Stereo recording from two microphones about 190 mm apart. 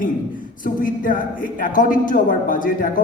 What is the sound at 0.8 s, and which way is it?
A man's voice, 45° left (ahead or behind).